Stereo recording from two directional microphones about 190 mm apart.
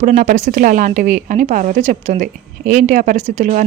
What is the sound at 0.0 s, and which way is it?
A woman's voice, 40° right (ahead or behind).